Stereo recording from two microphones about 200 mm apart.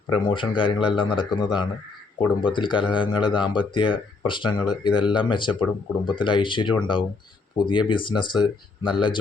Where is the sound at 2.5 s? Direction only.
25° left (ahead or behind).